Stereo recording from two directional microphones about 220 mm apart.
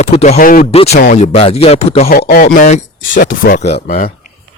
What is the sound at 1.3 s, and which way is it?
Speech, 25° left (ahead or behind).